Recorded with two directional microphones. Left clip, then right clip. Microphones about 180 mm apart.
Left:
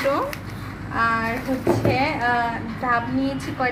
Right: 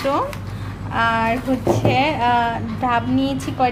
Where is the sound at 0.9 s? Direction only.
55° right (ahead or behind).